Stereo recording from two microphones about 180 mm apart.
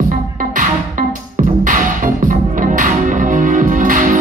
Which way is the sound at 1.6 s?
45° right (ahead or behind).